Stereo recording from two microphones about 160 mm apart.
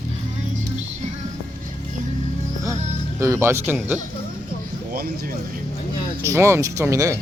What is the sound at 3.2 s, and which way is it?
Speech, 20° right (ahead or behind).